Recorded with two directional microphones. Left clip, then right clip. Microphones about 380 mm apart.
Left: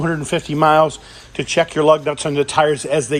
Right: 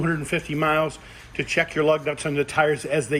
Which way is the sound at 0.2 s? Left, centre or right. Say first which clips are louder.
Left 5 dB; centre.